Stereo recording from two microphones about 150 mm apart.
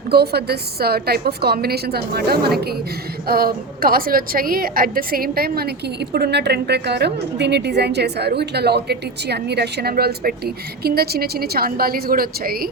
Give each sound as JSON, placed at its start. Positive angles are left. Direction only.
{"t": 0.1, "sound": "a woman's voice", "side_deg": -90}